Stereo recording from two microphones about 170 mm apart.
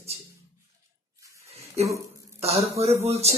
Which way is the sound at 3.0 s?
40° right (ahead or behind).